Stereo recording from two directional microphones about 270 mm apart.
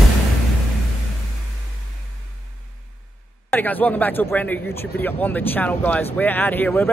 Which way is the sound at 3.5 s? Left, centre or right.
Centre.